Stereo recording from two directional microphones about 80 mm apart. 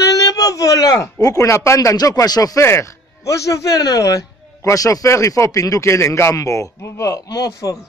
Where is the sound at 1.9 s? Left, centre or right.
Left.